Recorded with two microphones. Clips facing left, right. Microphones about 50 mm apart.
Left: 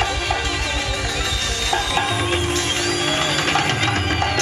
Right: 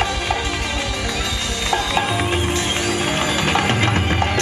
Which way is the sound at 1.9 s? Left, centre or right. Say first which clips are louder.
Right 1 dB; centre.